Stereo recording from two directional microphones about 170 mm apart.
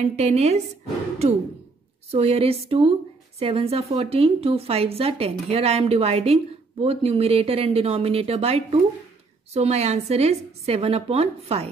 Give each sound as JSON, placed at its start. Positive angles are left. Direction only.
{"t": 0.0, "sound": "a woman's voice", "side_deg": -40}
{"t": 2.0, "sound": "a woman's voice", "side_deg": -35}